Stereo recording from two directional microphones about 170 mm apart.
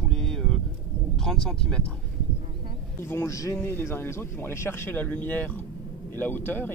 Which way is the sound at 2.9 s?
15° left (ahead or behind).